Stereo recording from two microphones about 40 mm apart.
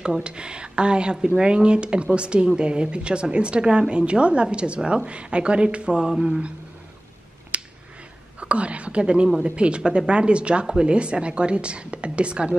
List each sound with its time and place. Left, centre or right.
0.0 s speech: right
7.5 s finger snapping: right
8.4 s a woman's voice: right